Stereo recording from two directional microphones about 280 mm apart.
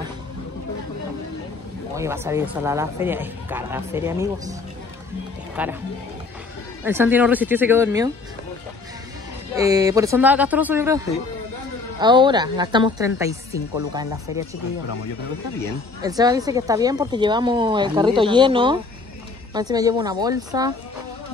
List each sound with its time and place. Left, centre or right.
2.0 s speech: centre
5.6 s speech: centre
6.8 s speech: centre
9.6 s speech: centre
16.0 s speech: centre